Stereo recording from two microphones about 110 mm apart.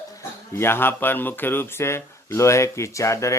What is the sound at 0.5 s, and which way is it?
Speech, 20° left (ahead or behind).